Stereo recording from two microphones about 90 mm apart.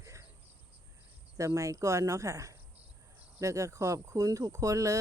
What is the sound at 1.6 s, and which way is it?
Speech, 35° right (ahead or behind).